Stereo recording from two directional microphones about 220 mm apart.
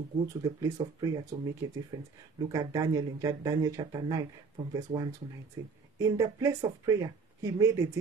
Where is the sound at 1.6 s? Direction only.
15° right (ahead or behind).